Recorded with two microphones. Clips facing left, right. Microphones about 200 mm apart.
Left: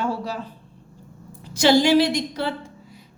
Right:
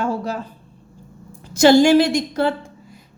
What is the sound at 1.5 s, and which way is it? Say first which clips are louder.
A woman's voice: right 5 dB; 45° right (ahead or behind).